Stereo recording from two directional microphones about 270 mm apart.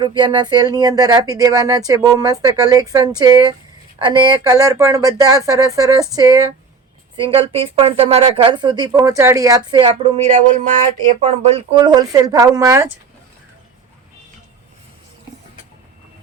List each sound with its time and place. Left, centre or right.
0.0 s speech: centre